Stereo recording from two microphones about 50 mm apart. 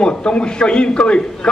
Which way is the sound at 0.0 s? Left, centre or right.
Left.